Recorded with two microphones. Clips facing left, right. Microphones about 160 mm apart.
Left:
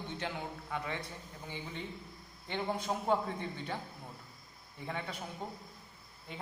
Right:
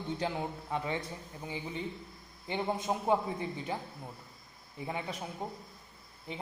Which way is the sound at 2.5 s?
20° right (ahead or behind).